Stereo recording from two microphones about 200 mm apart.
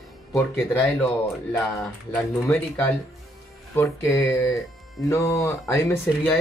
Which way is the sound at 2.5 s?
15° left (ahead or behind).